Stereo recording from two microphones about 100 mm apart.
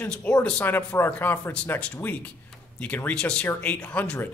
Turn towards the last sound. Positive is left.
turn(degrees=15)  # may be behind; listen again after turning